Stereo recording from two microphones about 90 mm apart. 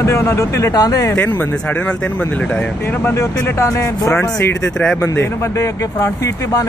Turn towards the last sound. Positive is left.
turn(degrees=30)  # may be behind; listen again after turning